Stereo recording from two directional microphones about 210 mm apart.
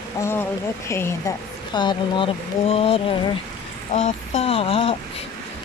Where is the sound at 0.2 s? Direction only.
10° left (ahead or behind).